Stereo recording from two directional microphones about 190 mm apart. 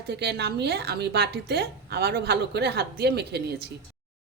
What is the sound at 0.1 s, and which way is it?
A woman's voice, 60° right (ahead or behind).